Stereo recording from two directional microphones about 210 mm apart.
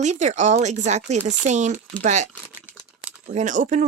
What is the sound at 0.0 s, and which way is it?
Speech, 35° right (ahead or behind).